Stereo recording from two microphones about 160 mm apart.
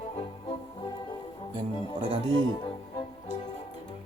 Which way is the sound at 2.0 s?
35° right (ahead or behind).